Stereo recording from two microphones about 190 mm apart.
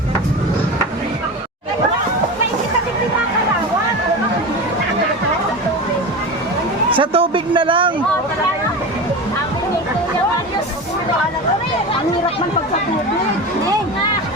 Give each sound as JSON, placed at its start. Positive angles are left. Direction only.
{"t": 6.9, "sound": "speech", "side_deg": -30}